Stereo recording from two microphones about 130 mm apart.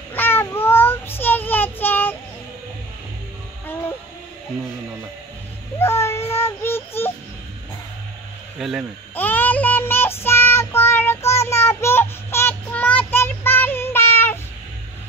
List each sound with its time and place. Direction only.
0.1 s child singing: 15° left (ahead or behind)
5.8 s child singing: 20° left (ahead or behind)
8.5 s a sound: centre (ahead or behind)
9.1 s child singing: 15° left (ahead or behind)